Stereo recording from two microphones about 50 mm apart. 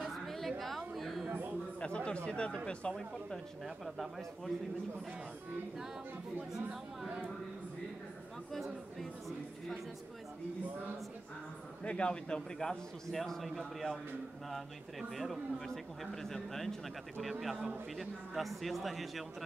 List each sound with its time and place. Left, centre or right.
0.0 s a sound: centre
1.8 s speech: left
2.9 s a man's voice: centre
8.5 s speech: centre
11.8 s a man's voice: left; by 19.2 s centre